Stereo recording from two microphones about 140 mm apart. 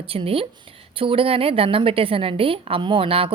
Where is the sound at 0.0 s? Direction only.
40° right (ahead or behind).